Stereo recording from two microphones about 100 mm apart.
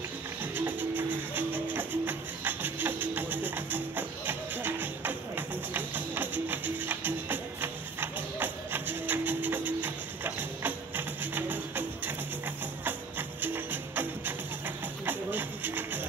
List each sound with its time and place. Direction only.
0.4 s music: 20° right (ahead or behind)
13.4 s music: 20° right (ahead or behind)